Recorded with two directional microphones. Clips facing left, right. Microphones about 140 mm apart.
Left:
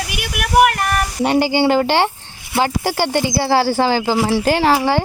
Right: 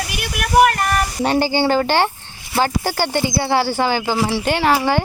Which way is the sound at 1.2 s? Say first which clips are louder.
Left 3 dB; 20° left (ahead or behind).